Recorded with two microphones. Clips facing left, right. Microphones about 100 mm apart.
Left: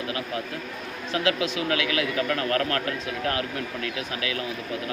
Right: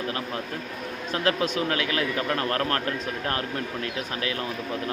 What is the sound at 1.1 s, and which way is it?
Speech, 45° right (ahead or behind).